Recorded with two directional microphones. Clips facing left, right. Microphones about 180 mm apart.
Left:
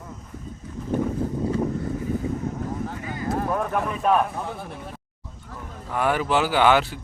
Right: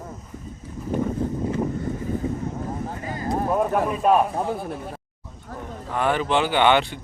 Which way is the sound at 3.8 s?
10° right (ahead or behind).